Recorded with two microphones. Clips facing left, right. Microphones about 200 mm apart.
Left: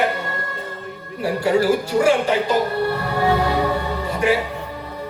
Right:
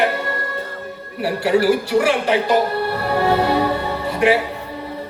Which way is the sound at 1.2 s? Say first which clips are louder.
Right 1 dB; 65° right (ahead or behind).